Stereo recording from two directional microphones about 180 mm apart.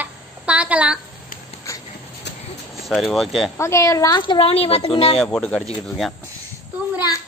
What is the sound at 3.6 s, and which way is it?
A woman's voice, 15° left (ahead or behind).